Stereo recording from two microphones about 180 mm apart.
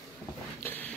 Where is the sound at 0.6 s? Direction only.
10° left (ahead or behind).